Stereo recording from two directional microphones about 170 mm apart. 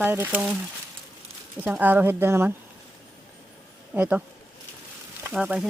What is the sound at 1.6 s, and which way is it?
Speech, 10° right (ahead or behind).